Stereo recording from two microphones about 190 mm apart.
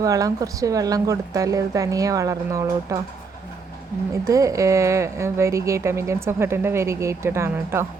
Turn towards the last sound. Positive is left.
turn(degrees=-15)  # may be behind; listen again after turning